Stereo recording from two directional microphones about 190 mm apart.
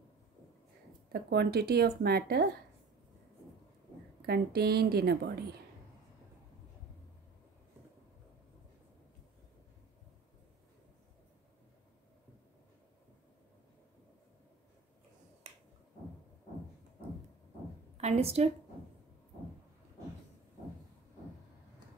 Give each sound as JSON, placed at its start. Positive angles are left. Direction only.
{"t": 1.1, "sound": "speech", "side_deg": -60}
{"t": 4.3, "sound": "speech", "side_deg": -55}
{"t": 18.0, "sound": "a woman's voice", "side_deg": -30}